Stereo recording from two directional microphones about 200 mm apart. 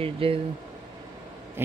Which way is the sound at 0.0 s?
30° right (ahead or behind).